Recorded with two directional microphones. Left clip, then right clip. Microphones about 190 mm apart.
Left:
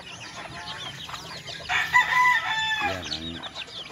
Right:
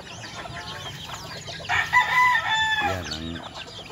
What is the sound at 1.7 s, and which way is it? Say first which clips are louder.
Chicken: right 1 dB; 50° right (ahead or behind).